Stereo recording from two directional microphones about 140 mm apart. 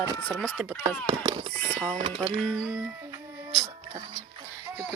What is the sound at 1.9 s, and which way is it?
Speech, 45° right (ahead or behind).